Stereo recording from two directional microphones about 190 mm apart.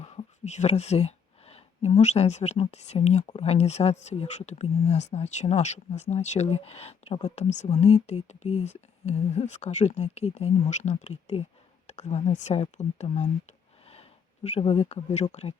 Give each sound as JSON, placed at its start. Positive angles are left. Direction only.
{"t": 0.0, "sound": "speech", "side_deg": 35}